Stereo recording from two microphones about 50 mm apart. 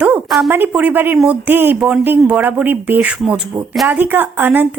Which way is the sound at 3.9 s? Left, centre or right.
Right.